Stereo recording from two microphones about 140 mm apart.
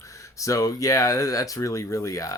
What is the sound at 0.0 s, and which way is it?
Speech, 20° left (ahead or behind).